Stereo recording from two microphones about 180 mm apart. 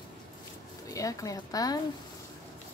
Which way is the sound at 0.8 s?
20° left (ahead or behind).